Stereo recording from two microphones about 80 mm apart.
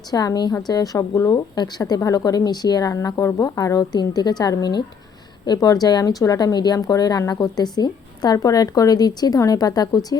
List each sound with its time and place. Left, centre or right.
0.1 s a woman's voice: left
1.5 s a woman's voice: left
2.9 s a woman's voice: left